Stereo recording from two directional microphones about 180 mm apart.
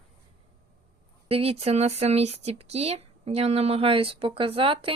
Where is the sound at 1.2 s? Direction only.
30° right (ahead or behind).